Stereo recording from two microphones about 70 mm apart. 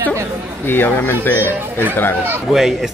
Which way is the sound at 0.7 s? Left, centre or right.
Left.